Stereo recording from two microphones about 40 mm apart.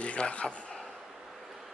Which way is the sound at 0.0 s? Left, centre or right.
Left.